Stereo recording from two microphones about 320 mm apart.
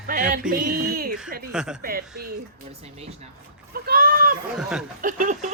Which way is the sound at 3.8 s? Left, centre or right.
Right.